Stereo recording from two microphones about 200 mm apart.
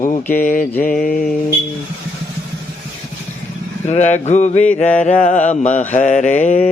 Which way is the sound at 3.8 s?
35° left (ahead or behind).